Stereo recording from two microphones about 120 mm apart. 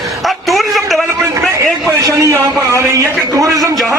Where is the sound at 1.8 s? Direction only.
25° right (ahead or behind).